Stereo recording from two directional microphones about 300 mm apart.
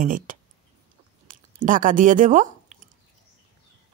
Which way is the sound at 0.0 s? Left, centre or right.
Right.